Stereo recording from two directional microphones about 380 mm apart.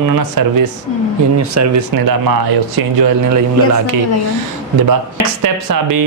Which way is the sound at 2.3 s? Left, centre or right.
Right.